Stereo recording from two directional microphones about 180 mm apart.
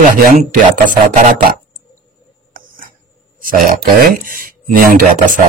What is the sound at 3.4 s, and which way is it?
Speech, 50° right (ahead or behind).